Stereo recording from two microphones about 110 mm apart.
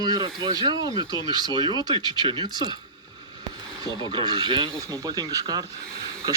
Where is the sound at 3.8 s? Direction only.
45° right (ahead or behind).